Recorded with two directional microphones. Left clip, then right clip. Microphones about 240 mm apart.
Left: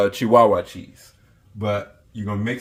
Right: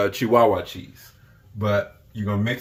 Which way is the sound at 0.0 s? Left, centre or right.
Left.